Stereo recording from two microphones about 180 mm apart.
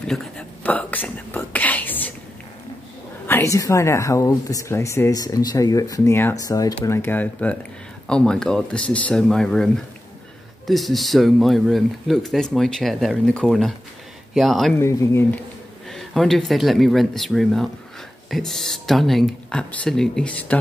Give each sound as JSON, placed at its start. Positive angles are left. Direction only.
{"t": 0.0, "sound": "whispering", "side_deg": 5}
{"t": 3.3, "sound": "speech", "side_deg": 15}
{"t": 10.7, "sound": "speech", "side_deg": 0}
{"t": 14.8, "sound": "speech", "side_deg": 15}
{"t": 15.9, "sound": "speech", "side_deg": 0}